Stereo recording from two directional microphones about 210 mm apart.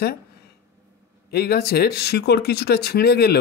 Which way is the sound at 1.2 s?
50° left (ahead or behind).